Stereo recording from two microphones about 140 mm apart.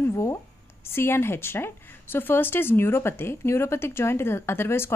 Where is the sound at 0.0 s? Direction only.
20° left (ahead or behind).